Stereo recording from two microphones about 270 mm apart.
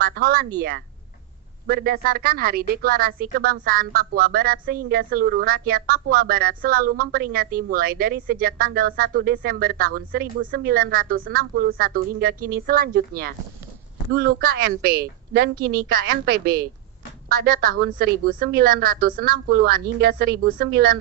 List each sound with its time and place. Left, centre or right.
0.0 s a sound: right
1.7 s a woman's voice: right
18.0 s a woman's voice: right